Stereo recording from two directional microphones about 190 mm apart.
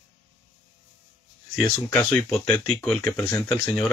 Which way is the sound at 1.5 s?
10° left (ahead or behind).